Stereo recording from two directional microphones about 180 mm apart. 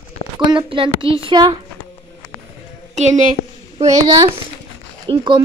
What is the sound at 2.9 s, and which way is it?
A woman's voice, 40° right (ahead or behind).